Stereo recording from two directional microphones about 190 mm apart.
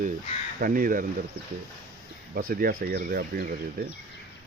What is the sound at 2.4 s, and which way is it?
Speech, 50° right (ahead or behind).